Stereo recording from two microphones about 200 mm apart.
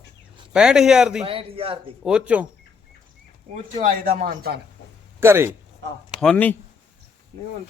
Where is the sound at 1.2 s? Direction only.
30° right (ahead or behind).